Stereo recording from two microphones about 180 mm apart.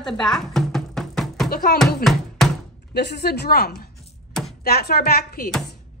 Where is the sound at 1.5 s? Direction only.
55° left (ahead or behind).